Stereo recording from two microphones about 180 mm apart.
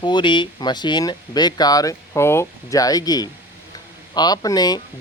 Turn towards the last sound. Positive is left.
turn(degrees=20)  # may be behind; listen again after turning